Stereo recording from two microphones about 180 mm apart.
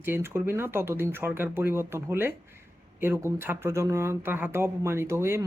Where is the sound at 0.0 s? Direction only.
15° right (ahead or behind).